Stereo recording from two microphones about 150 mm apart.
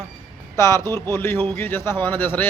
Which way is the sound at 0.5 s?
20° left (ahead or behind).